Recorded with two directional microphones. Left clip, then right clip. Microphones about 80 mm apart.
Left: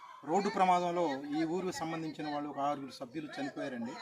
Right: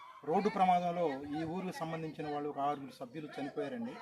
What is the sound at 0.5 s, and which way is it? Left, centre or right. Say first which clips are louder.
Speech: left 2 dB; right.